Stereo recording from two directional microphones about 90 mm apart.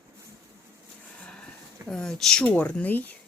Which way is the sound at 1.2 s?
5° left (ahead or behind).